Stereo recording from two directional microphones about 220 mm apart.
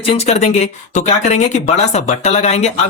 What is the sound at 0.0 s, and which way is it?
Speech, 30° left (ahead or behind).